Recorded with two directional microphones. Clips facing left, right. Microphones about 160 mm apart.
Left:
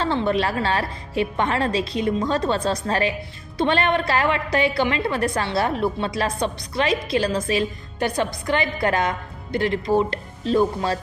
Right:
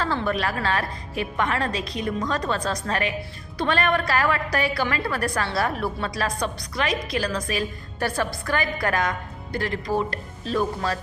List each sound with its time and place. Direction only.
0.0 s a woman's voice: 25° left (ahead or behind)